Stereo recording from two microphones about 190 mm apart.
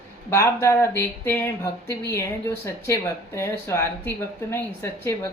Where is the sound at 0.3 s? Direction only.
15° left (ahead or behind).